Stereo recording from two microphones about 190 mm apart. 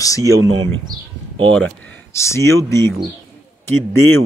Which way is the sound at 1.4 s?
5° left (ahead or behind).